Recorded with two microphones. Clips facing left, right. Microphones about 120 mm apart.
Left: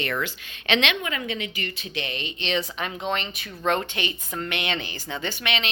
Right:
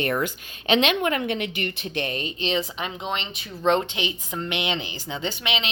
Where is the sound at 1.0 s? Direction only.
60° right (ahead or behind).